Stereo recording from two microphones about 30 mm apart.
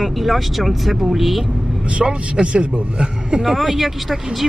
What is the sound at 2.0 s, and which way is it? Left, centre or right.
A man's voice, right.